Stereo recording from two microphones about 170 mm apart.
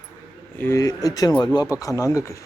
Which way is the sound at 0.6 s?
15° left (ahead or behind).